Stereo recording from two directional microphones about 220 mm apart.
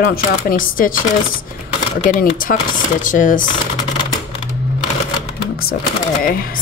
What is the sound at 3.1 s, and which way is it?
Speech, 35° left (ahead or behind).